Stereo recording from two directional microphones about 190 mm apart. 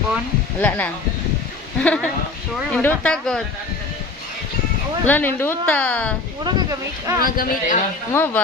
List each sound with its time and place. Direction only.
0.6 s speech: 5° left (ahead or behind)
1.8 s speech: 5° left (ahead or behind)
5.0 s speech: 10° left (ahead or behind)
6.4 s speech: 20° right (ahead or behind)
7.2 s speech: 50° left (ahead or behind)
8.1 s speech: 10° left (ahead or behind)